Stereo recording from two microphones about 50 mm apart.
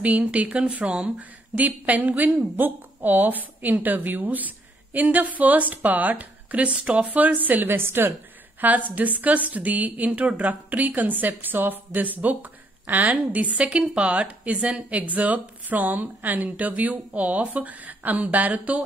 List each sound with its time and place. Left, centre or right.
0.0 s a woman's voice: right
7.7 s a woman's voice: right
8.5 s a woman's voice: right